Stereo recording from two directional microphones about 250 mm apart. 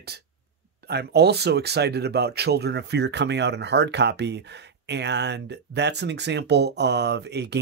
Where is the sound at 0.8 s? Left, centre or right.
Right.